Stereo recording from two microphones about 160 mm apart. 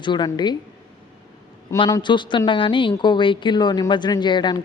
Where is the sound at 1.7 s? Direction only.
25° left (ahead or behind).